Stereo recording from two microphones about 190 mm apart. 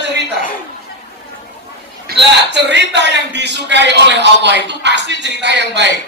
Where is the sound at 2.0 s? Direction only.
65° right (ahead or behind).